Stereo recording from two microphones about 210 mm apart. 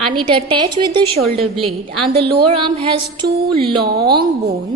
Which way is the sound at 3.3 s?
45° right (ahead or behind).